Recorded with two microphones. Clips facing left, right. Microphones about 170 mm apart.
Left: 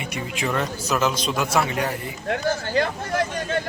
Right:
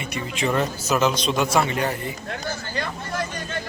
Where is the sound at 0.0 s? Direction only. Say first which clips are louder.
Even; 15° left (ahead or behind).